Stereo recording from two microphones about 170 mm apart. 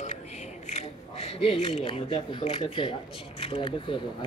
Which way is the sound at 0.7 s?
40° left (ahead or behind).